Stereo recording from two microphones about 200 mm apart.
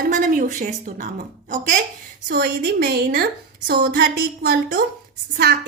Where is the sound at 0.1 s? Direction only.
40° right (ahead or behind).